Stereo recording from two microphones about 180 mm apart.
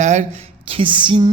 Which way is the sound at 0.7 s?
30° right (ahead or behind).